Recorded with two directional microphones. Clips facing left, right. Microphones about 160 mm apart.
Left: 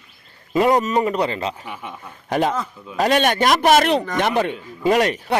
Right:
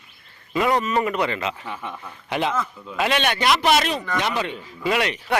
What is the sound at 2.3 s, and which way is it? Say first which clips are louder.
Speech: left 3 dB; 40° left (ahead or behind).